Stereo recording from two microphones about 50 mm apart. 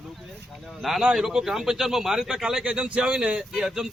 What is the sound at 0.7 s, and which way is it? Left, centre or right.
Speech, centre.